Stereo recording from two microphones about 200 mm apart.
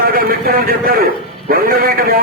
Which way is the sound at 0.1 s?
45° right (ahead or behind).